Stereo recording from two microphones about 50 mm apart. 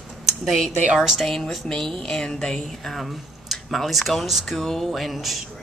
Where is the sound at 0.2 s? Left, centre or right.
Centre.